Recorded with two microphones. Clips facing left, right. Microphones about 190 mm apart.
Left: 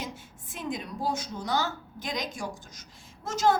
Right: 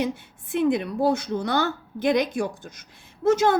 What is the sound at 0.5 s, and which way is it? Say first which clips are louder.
A woman's voice: right 12 dB; 65° right (ahead or behind).